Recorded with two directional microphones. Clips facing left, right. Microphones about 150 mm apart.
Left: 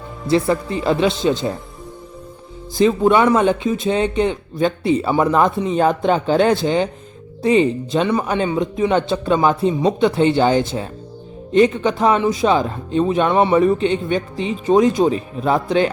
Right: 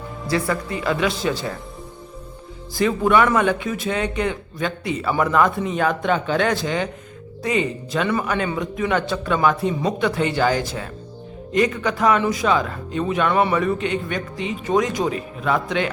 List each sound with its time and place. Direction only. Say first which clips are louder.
0.3 s speech: left 6 dB; 25° left (ahead or behind)
2.7 s speech: left 4 dB; 25° left (ahead or behind)